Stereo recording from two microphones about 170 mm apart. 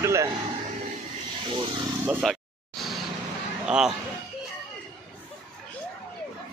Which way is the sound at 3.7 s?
5° right (ahead or behind).